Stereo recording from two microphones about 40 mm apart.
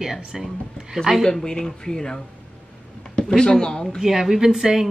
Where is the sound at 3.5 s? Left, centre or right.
Centre.